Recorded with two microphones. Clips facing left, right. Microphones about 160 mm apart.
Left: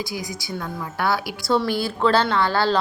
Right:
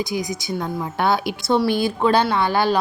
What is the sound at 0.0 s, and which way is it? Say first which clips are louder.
A woman's voice: right 5 dB; 20° right (ahead or behind).